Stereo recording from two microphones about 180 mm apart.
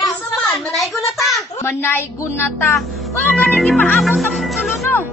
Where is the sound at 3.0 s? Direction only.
Centre (ahead or behind).